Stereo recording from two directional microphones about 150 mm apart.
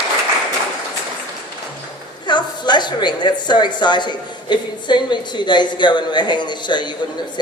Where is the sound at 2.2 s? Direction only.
30° left (ahead or behind).